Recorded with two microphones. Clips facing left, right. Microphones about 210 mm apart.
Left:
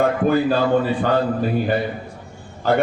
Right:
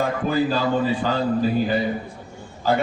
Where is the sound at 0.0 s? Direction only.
55° left (ahead or behind).